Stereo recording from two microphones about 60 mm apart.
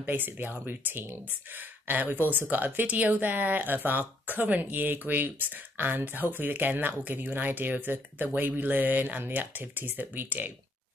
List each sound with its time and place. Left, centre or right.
0.0 s speech: right